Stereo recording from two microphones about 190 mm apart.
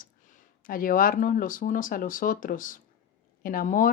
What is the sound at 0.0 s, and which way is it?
Speech, 45° left (ahead or behind).